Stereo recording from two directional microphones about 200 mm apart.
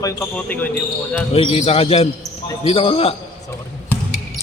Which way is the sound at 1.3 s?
30° left (ahead or behind).